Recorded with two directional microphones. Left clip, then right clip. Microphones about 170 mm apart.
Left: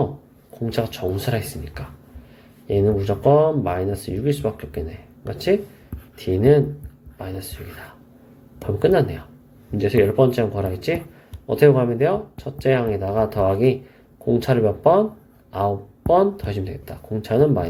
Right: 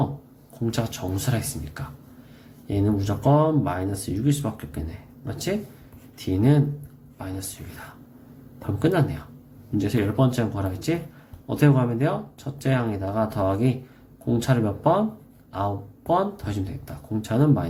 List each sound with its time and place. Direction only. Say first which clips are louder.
0.6 s speech: left 5 dB; 20° left (ahead or behind)
6.1 s speech: left 7 dB; 20° left (ahead or behind)
8.6 s speech: left 6 dB; 20° left (ahead or behind)